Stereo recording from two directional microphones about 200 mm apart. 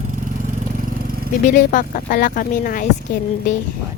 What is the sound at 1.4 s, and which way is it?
Speech, 40° left (ahead or behind).